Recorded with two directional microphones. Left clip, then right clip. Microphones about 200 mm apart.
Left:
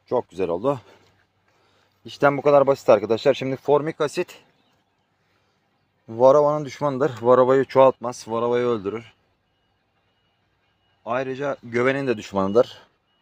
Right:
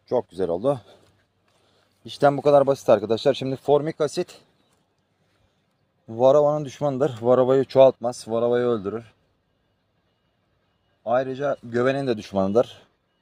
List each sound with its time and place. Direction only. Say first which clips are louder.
0.1 s speech: even; 45° right (ahead or behind)
2.0 s speech: even; 40° right (ahead or behind)
3.7 s speech: even; 45° right (ahead or behind)
4.1 s speech: left 1 dB; 75° right (ahead or behind)
6.1 s speech: left 2 dB; 40° right (ahead or behind)
7.9 s speech: even; 60° right (ahead or behind)
11.0 s speech: right 2 dB; 65° right (ahead or behind)
12.4 s speech: left 2 dB; 40° right (ahead or behind)